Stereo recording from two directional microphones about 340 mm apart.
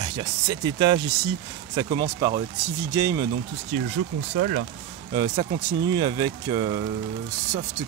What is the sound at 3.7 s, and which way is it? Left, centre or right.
Speech, right.